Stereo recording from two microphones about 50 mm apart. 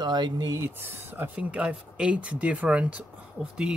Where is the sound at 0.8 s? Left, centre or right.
Right.